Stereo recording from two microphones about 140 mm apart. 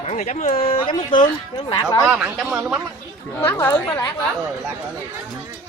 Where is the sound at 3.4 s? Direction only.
20° left (ahead or behind).